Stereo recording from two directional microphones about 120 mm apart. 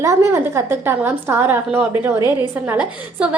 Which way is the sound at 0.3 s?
20° right (ahead or behind).